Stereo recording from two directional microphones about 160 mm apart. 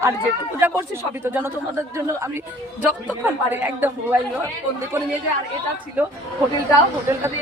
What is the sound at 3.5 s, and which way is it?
Speech, 10° right (ahead or behind).